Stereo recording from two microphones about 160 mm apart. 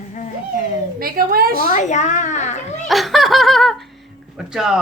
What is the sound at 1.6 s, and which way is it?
Speech, 50° left (ahead or behind).